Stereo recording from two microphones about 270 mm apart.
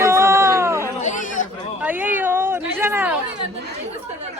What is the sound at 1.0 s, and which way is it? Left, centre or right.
Speech, left.